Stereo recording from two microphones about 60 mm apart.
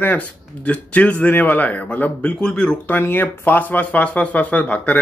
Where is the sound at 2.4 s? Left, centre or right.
Centre.